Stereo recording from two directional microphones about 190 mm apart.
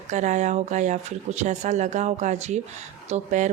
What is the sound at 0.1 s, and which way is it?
Speech, 40° right (ahead or behind).